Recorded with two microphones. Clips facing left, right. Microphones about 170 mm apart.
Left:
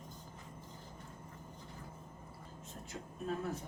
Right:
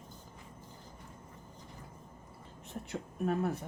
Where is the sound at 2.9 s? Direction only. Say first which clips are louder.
Right 7 dB; 65° right (ahead or behind).